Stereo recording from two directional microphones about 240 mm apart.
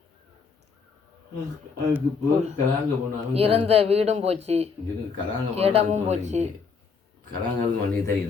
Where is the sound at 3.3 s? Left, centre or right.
Right.